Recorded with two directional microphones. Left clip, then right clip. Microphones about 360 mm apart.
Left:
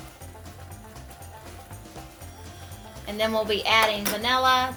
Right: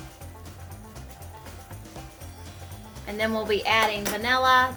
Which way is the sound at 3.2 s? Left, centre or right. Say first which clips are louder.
Left 1 dB; centre.